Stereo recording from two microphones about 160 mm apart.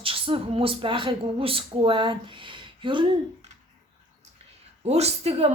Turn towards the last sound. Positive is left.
turn(degrees=-40)  # may be behind; listen again after turning